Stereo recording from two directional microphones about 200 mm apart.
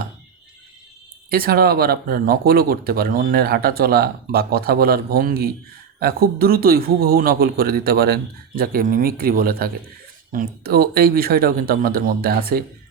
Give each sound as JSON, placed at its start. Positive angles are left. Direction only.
{"t": 1.3, "sound": "speech", "side_deg": -50}